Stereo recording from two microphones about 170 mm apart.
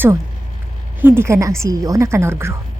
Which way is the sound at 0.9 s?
10° right (ahead or behind).